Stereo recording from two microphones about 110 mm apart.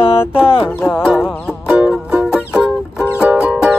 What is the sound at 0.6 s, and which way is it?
Music, 20° left (ahead or behind).